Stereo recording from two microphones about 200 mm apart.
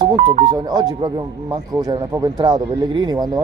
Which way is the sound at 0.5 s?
20° right (ahead or behind).